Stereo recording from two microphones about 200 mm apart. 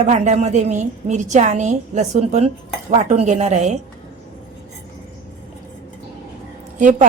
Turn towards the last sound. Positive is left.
turn(degrees=-40)  # may be behind; listen again after turning